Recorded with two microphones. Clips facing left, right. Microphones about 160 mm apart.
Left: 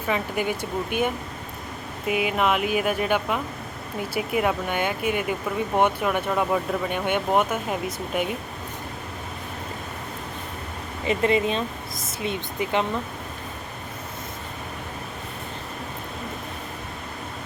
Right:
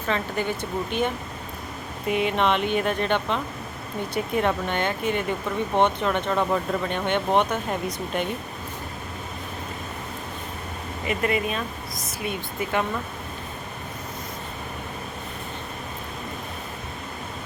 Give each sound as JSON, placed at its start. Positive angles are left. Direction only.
{"t": 0.1, "sound": "speech", "side_deg": 10}
{"t": 11.0, "sound": "speech", "side_deg": 25}